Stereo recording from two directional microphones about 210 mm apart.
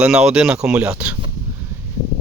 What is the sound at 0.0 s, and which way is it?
Speech, 5° right (ahead or behind).